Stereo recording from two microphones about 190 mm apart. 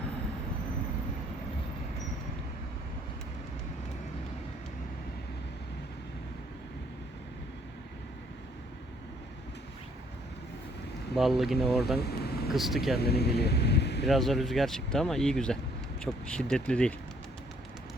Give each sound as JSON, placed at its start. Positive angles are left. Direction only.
{"t": 11.1, "sound": "speech", "side_deg": 0}
{"t": 11.9, "sound": "vehicle", "side_deg": 55}
{"t": 12.5, "sound": "speech", "side_deg": 0}
{"t": 13.0, "sound": "speech", "side_deg": 60}
{"t": 14.0, "sound": "speech", "side_deg": 0}